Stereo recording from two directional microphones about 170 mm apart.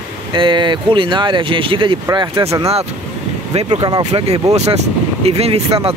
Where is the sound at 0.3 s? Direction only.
30° right (ahead or behind).